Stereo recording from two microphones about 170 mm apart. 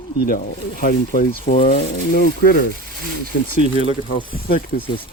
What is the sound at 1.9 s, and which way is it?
Speech, 60° left (ahead or behind).